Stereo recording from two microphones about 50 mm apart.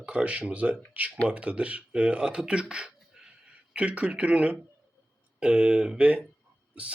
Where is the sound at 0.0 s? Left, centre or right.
Right.